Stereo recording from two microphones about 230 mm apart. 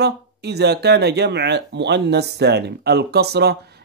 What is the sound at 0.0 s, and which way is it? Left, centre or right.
Speech, right.